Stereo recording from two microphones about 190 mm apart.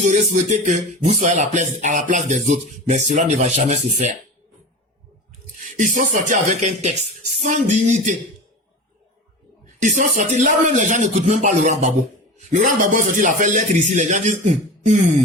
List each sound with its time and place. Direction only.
0.0 s speech: 40° right (ahead or behind)
5.7 s speech: 40° right (ahead or behind)
9.8 s speech: 40° right (ahead or behind)